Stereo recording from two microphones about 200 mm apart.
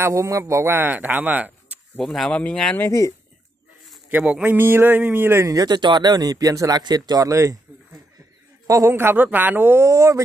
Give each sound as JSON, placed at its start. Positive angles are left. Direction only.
{"t": 0.0, "sound": "speech", "side_deg": -15}
{"t": 2.0, "sound": "speech", "side_deg": 5}
{"t": 3.9, "sound": "a man's voice", "side_deg": -5}
{"t": 8.6, "sound": "a man's voice", "side_deg": -15}